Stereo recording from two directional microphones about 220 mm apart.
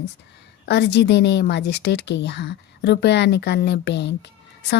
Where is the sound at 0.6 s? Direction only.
50° left (ahead or behind).